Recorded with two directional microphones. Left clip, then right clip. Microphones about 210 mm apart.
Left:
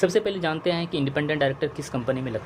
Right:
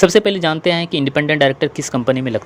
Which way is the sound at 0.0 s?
40° right (ahead or behind).